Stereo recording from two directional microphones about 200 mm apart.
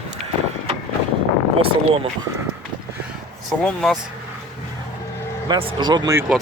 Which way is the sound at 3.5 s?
Centre (ahead or behind).